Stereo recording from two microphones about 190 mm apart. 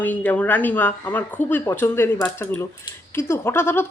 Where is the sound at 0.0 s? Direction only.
10° left (ahead or behind).